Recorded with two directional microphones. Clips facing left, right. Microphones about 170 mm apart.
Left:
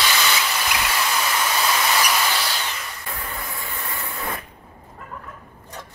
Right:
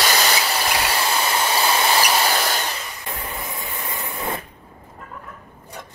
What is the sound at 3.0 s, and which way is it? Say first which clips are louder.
Spray: right 2 dB; 20° right (ahead or behind).